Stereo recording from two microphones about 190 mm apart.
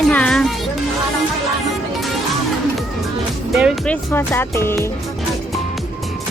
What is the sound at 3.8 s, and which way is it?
Speech, 10° left (ahead or behind).